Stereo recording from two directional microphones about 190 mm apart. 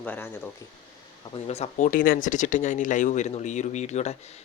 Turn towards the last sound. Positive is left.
turn(degrees=35)  # may be behind; listen again after turning